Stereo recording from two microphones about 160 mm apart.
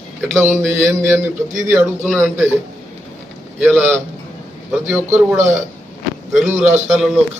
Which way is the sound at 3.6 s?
10° right (ahead or behind).